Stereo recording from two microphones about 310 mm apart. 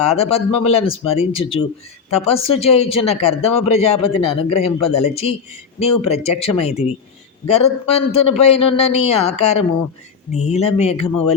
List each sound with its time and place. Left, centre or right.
0.0 s a man's voice: centre